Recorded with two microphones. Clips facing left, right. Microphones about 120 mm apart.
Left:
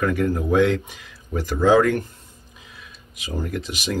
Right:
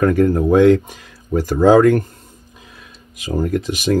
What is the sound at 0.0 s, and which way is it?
Speech, 40° right (ahead or behind).